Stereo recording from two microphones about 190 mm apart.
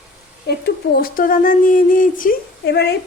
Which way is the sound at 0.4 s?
55° left (ahead or behind).